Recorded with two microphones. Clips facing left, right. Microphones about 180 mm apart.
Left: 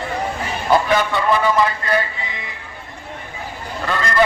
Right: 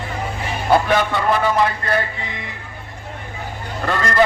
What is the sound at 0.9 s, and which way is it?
A man's voice, 55° right (ahead or behind).